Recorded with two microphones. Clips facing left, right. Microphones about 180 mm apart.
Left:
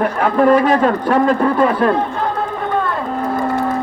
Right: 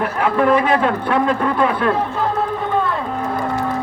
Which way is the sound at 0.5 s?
40° left (ahead or behind).